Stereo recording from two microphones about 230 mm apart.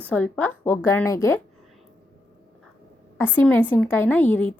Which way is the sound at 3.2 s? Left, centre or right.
Centre.